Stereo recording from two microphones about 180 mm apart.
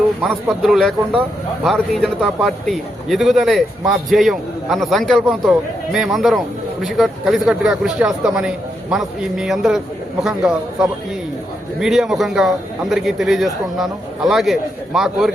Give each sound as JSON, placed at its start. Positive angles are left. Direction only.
{"t": 0.2, "sound": "a man's voice", "side_deg": 0}